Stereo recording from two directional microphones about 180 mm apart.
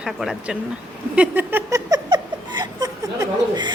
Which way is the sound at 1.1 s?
10° right (ahead or behind).